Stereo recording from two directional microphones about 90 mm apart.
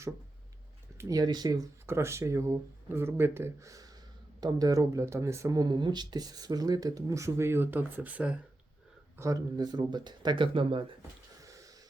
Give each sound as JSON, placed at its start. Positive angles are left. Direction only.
{"t": 0.9, "sound": "speech", "side_deg": -40}
{"t": 1.9, "sound": "speech", "side_deg": -30}
{"t": 3.7, "sound": "a sound", "side_deg": -40}
{"t": 4.4, "sound": "speech", "side_deg": -45}
{"t": 5.6, "sound": "speech", "side_deg": -55}
{"t": 9.1, "sound": "speech", "side_deg": -35}
{"t": 9.6, "sound": "speech", "side_deg": -55}
{"t": 11.4, "sound": "a sound", "side_deg": -40}